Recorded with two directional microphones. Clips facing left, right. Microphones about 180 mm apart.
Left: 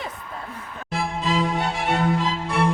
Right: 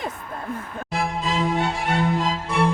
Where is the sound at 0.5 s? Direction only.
50° right (ahead or behind).